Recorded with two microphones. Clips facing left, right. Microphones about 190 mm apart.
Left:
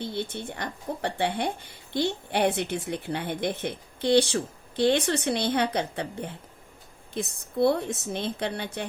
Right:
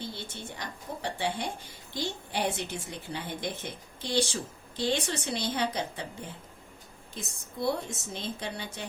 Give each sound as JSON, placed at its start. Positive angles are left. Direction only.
{"t": 0.5, "sound": "a woman's voice", "side_deg": 60}